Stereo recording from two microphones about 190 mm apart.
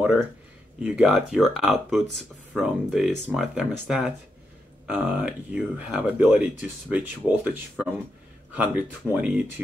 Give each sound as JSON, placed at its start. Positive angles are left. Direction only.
{"t": 0.0, "sound": "speech", "side_deg": -5}